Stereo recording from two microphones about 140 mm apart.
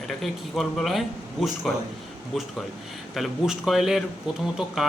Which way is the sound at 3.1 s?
Centre (ahead or behind).